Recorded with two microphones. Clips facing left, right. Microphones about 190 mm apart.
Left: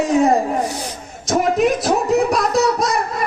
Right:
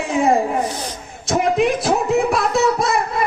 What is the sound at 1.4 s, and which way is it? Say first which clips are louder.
Speech: left 1 dB; 45° left (ahead or behind).